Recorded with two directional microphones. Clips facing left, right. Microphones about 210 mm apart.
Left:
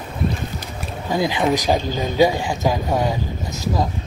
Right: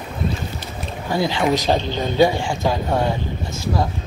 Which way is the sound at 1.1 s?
15° left (ahead or behind).